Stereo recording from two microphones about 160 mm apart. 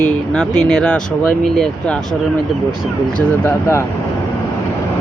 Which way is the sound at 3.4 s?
15° left (ahead or behind).